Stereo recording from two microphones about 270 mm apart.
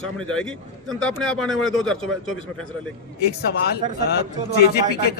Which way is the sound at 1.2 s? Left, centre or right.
Centre.